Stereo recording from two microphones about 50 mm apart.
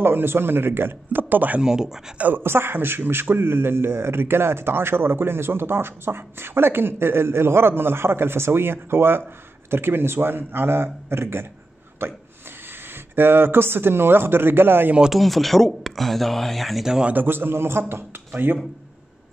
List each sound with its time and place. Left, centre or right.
0.0 s a man's voice: right
1.6 s speech: centre
2.3 s a man's voice: right
15.1 s speech: centre
17.1 s a man's voice: right